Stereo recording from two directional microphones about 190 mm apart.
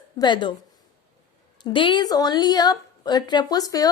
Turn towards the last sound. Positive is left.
turn(degrees=20)  # may be behind; listen again after turning